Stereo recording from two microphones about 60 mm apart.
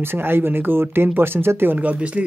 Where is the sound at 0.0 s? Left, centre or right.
Right.